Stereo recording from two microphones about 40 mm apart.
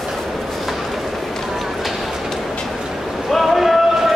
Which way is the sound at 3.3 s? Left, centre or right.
Centre.